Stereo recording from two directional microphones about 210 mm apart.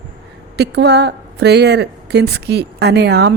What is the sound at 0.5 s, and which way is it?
A woman's voice, 55° right (ahead or behind).